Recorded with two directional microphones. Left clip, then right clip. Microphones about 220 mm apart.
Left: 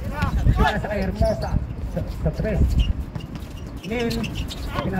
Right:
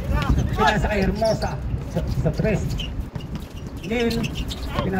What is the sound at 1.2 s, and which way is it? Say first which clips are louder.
Speech: right 2 dB; 40° right (ahead or behind).